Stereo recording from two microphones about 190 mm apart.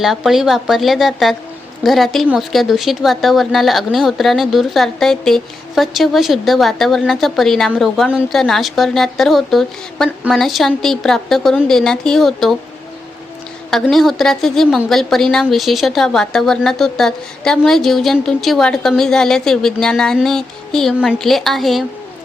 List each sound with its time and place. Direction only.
0.0 s speech: centre (ahead or behind)
13.7 s speech: centre (ahead or behind)